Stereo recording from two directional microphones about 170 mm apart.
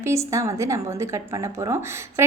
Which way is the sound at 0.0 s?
15° right (ahead or behind).